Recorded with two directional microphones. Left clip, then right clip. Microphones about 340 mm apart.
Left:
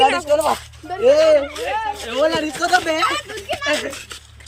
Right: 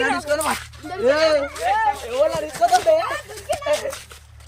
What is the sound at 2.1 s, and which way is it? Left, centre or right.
Speech, right.